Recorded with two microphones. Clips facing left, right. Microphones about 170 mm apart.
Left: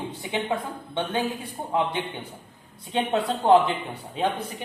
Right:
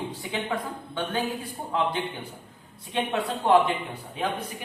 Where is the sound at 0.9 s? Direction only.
25° left (ahead or behind).